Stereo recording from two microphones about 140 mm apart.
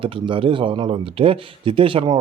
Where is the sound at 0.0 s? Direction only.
40° right (ahead or behind).